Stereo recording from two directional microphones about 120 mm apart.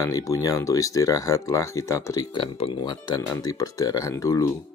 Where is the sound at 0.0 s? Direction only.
30° left (ahead or behind).